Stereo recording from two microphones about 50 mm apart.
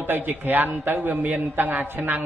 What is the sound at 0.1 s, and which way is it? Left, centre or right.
A man's voice, right.